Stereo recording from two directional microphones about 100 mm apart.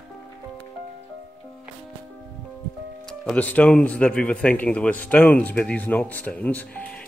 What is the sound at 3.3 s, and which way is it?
Speech, 15° left (ahead or behind).